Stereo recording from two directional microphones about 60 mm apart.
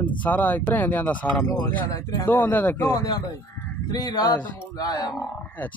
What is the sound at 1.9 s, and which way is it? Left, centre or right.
Speech, left.